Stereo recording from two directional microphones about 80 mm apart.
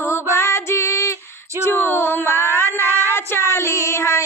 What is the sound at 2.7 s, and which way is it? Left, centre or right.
Child singing, right.